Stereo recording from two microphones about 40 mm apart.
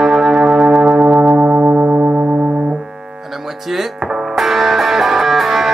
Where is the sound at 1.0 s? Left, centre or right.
Right.